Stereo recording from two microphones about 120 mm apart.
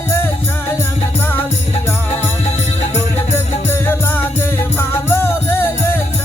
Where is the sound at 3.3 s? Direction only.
20° left (ahead or behind).